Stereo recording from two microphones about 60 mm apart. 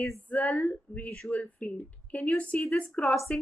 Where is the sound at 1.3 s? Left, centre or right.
Left.